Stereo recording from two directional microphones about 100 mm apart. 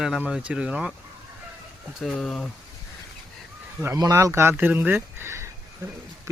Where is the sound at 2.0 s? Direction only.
Centre (ahead or behind).